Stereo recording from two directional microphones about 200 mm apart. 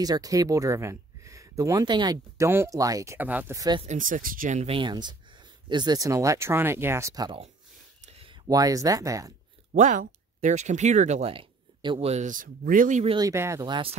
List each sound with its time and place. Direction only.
0.0 s speech: 20° right (ahead or behind)
3.8 s speech: 40° right (ahead or behind); by 7.3 s 15° right (ahead or behind)
8.5 s speech: 20° right (ahead or behind)
9.8 s speech: 40° right (ahead or behind)
13.1 s speech: 15° right (ahead or behind)